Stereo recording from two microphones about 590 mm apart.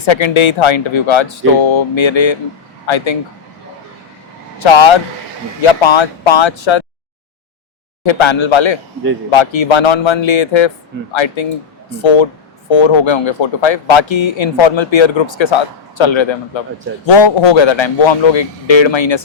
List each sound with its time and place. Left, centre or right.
0.0 s speech: left
4.6 s speech: left
8.0 s speech: left